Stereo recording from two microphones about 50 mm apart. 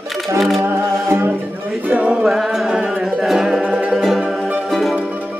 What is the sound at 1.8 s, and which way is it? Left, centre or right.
Music, right.